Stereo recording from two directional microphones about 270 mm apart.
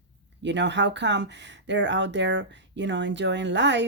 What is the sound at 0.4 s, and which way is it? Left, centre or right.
Speech, right.